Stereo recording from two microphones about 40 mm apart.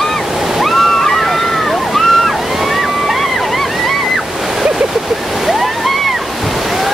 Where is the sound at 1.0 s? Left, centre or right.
Centre.